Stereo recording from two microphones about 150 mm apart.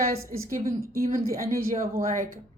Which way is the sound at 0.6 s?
75° right (ahead or behind).